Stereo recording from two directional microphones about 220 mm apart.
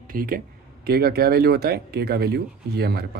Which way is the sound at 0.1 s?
40° right (ahead or behind).